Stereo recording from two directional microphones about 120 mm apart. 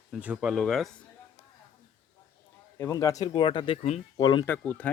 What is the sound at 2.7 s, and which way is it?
Speech, 25° left (ahead or behind).